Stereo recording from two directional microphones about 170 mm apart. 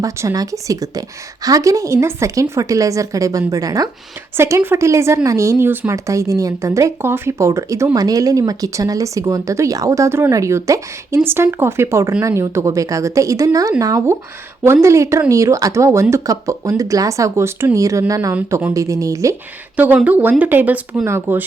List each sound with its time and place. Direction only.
0.0 s a woman's voice: 20° right (ahead or behind)
18.3 s a woman's voice: 10° right (ahead or behind)
18.7 s a woman's voice: 20° right (ahead or behind)